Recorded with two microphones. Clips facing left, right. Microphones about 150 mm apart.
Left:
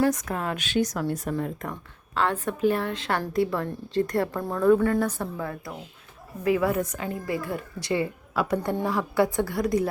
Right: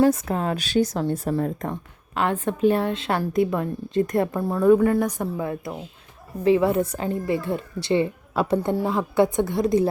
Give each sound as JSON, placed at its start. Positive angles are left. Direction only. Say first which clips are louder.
{"t": 0.0, "sound": "speech", "louder": "right 5 dB", "side_deg": -30}
{"t": 1.7, "sound": "a woman's voice", "louder": "right 2 dB", "side_deg": -15}